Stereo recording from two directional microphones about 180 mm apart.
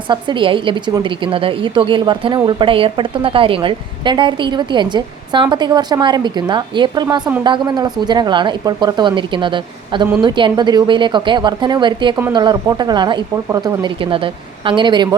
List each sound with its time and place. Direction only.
0.1 s a woman's voice: 25° right (ahead or behind)